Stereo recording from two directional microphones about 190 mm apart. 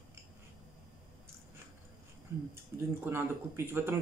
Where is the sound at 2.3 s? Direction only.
15° right (ahead or behind).